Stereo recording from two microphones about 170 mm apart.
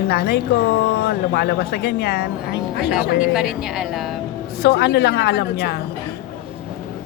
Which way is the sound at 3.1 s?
5° right (ahead or behind).